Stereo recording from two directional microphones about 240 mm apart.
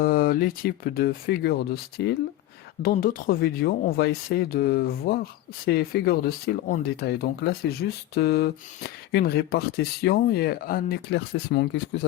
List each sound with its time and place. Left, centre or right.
0.0 s speech: left